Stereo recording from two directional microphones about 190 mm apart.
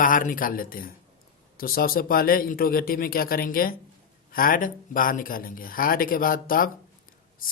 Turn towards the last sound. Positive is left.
turn(degrees=50)  # may be behind; listen again after turning